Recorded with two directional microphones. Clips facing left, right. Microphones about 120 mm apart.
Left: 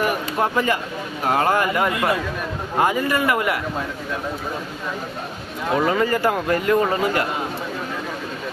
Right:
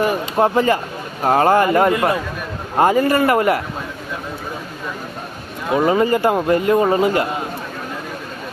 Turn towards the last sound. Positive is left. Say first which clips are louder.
# right 4 dB
turn(degrees=-25)  # may be behind; listen again after turning